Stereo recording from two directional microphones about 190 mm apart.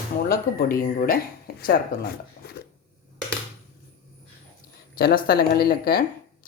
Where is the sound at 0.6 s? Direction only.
50° left (ahead or behind).